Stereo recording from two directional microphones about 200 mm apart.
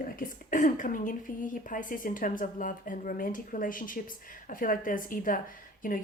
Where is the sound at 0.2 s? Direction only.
40° left (ahead or behind).